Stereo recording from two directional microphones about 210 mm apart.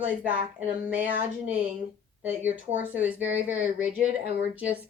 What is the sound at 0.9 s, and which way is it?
Speech, 5° right (ahead or behind).